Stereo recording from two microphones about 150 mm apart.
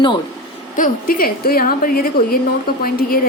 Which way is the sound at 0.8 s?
75° left (ahead or behind).